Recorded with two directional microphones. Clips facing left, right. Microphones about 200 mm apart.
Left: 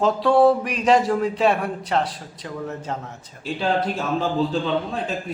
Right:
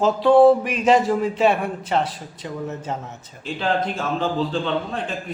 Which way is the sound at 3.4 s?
10° left (ahead or behind).